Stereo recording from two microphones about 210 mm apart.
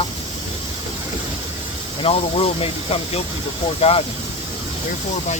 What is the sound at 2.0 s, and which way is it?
Speech, 25° left (ahead or behind).